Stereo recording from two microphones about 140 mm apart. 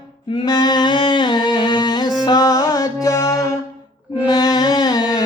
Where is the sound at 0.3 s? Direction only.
30° left (ahead or behind).